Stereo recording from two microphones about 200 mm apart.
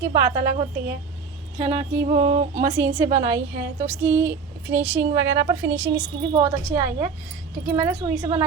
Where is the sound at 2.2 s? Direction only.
35° right (ahead or behind).